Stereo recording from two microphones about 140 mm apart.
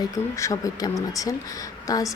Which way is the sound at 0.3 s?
25° left (ahead or behind).